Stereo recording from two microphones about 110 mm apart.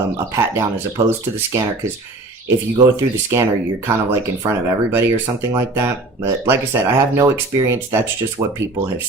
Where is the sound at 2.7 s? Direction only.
25° right (ahead or behind).